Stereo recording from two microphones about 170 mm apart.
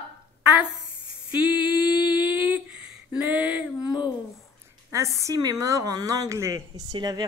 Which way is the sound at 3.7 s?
25° left (ahead or behind).